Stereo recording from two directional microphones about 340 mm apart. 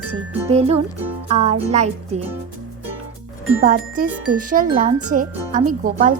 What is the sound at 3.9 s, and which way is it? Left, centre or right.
Speech, right.